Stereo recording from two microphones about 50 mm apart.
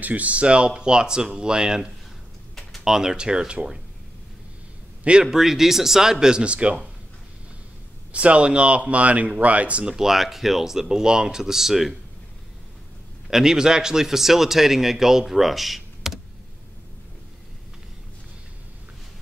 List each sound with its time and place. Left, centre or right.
0.0 s speech: right
5.2 s speech: centre; by 6.9 s right
8.1 s speech: right
9.9 s speech: centre
13.3 s speech: centre